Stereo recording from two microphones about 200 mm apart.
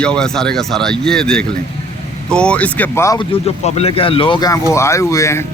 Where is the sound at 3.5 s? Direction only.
30° left (ahead or behind); by 5.4 s 15° left (ahead or behind).